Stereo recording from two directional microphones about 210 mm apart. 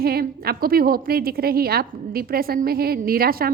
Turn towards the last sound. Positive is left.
turn(degrees=-45)  # may be behind; listen again after turning